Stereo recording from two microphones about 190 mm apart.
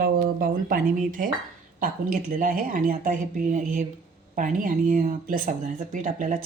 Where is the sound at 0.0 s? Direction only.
50° right (ahead or behind).